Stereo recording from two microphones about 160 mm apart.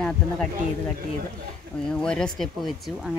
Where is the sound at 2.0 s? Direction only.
5° left (ahead or behind).